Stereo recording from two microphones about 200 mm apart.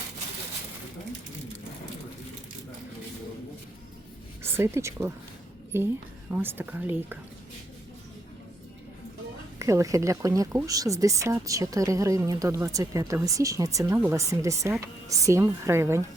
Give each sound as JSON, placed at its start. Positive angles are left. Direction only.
{"t": 4.4, "sound": "a woman's voice", "side_deg": -10}
{"t": 9.6, "sound": "speech", "side_deg": -15}